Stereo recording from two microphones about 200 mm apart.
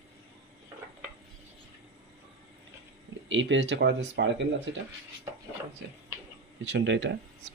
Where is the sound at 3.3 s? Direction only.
65° right (ahead or behind).